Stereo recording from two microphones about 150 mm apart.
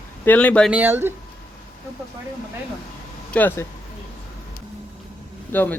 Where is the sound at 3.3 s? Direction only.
15° left (ahead or behind).